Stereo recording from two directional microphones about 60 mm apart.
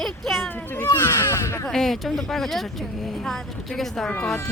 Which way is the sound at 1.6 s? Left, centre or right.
Centre.